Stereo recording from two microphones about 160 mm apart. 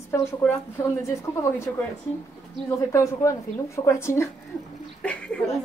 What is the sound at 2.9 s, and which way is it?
A woman's voice, 20° left (ahead or behind).